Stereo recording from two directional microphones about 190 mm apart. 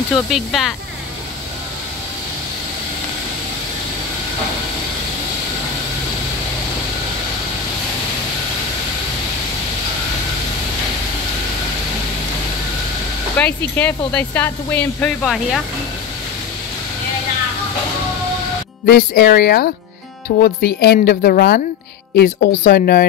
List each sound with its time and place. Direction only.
0.1 s speech: centre (ahead or behind)
13.4 s speech: 5° left (ahead or behind)
18.9 s speech: 55° left (ahead or behind)